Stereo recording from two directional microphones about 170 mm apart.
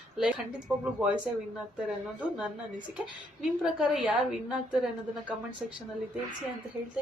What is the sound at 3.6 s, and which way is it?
A woman's voice, 5° right (ahead or behind).